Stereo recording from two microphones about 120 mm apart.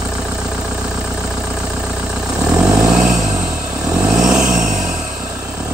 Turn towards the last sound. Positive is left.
turn(degrees=-90)